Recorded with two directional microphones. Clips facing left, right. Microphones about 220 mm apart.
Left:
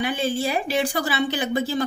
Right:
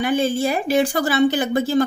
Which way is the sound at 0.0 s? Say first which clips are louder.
Right 5 dB; 45° right (ahead or behind).